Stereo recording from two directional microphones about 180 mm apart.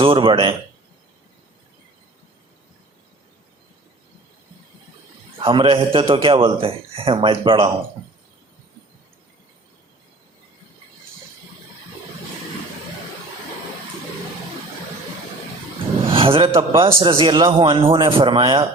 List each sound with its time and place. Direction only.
0.0 s a man's voice: 30° right (ahead or behind)
5.4 s a man's voice: 30° right (ahead or behind)
16.0 s a sound: 30° right (ahead or behind)
16.6 s a man's voice: 30° right (ahead or behind)